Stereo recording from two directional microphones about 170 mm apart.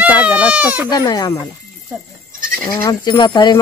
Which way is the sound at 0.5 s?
10° right (ahead or behind).